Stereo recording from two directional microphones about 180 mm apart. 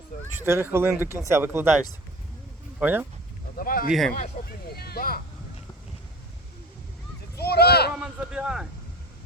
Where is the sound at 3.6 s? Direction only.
55° left (ahead or behind).